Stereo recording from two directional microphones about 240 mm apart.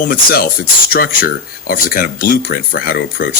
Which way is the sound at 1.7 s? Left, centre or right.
Left.